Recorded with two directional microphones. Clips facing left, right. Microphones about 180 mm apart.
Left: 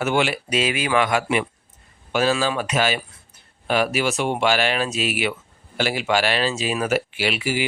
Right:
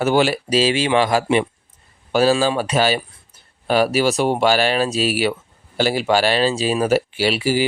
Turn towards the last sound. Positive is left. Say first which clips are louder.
# right 5 dB
turn(degrees=-35)  # may be behind; listen again after turning